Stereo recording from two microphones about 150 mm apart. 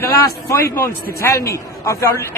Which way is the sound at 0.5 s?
20° left (ahead or behind).